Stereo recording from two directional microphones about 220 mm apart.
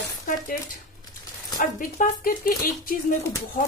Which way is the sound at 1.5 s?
35° left (ahead or behind).